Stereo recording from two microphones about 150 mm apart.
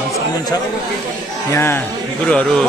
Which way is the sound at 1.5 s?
15° left (ahead or behind).